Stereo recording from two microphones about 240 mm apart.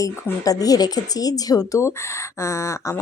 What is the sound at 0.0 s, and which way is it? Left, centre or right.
Speech, centre.